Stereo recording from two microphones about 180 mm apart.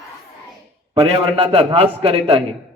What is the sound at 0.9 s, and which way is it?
A man's voice, 30° right (ahead or behind).